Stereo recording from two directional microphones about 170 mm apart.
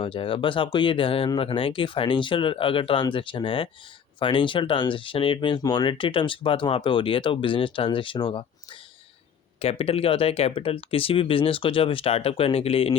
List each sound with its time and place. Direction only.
0.0 s speech: 30° left (ahead or behind)
9.6 s speech: 35° left (ahead or behind)